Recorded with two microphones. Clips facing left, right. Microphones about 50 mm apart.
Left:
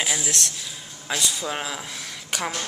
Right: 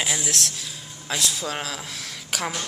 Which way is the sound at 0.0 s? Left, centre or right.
Centre.